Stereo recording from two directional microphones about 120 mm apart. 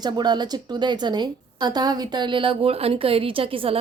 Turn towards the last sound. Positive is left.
turn(degrees=-50)  # may be behind; listen again after turning